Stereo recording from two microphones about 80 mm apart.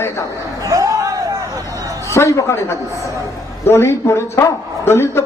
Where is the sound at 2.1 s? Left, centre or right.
Left.